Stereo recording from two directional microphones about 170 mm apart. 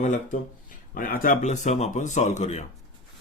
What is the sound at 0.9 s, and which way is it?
Speech, 55° left (ahead or behind).